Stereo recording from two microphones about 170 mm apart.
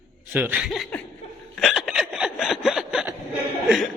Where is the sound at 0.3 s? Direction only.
10° right (ahead or behind).